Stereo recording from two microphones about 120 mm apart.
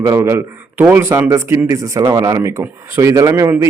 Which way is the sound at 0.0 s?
25° right (ahead or behind).